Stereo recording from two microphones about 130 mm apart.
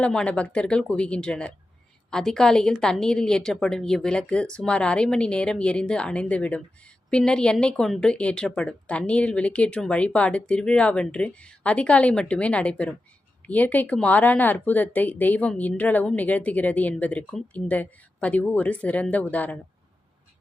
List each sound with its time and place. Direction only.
0.0 s a woman's voice: 5° left (ahead or behind)